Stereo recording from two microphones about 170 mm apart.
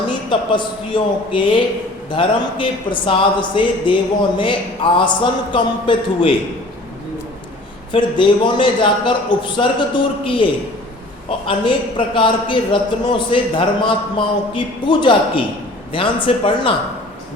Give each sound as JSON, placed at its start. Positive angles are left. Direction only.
{"t": 0.1, "sound": "a man's voice", "side_deg": 25}
{"t": 7.9, "sound": "a man's voice", "side_deg": 30}